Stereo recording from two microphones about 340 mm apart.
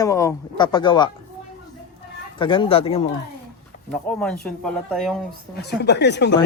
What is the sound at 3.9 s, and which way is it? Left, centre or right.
Speech, centre.